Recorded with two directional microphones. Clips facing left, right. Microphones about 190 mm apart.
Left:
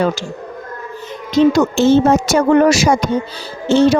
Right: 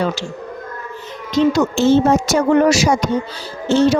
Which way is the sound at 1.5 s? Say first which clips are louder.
Left 2 dB; 60° left (ahead or behind).